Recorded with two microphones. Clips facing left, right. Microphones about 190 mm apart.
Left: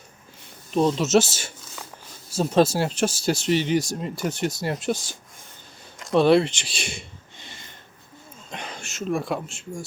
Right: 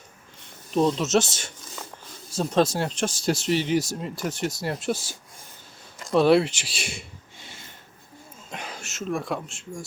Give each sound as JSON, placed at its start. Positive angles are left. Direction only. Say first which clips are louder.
{"t": 0.7, "sound": "speech", "louder": "left 2 dB", "side_deg": 0}
{"t": 6.0, "sound": "a sound", "louder": "left 1 dB", "side_deg": 0}
{"t": 8.4, "sound": "speech", "louder": "left 1 dB", "side_deg": -5}